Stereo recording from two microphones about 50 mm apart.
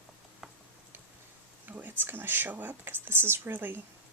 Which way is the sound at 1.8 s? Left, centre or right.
Right.